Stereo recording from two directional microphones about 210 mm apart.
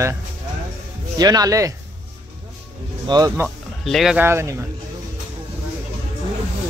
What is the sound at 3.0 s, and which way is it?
Speech, 20° right (ahead or behind).